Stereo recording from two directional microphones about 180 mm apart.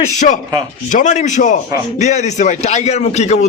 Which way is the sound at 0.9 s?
45° left (ahead or behind).